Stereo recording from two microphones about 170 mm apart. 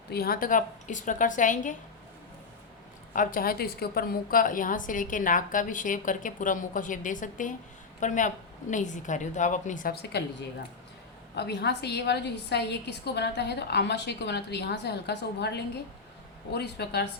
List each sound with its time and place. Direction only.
0.1 s a woman's voice: 65° left (ahead or behind)
3.1 s a woman's voice: 55° left (ahead or behind); by 10.2 s 70° left (ahead or behind)
11.3 s a woman's voice: 80° left